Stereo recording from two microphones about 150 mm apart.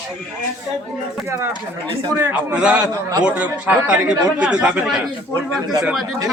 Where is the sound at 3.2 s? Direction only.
10° right (ahead or behind).